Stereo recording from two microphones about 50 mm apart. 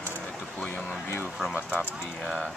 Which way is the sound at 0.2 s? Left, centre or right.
Centre.